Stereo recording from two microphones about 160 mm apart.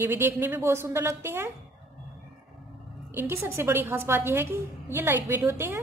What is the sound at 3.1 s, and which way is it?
A woman's voice, 15° right (ahead or behind).